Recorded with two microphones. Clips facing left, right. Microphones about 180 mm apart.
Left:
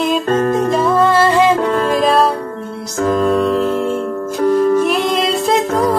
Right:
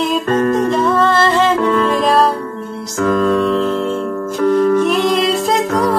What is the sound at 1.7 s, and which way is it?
Music, 45° left (ahead or behind).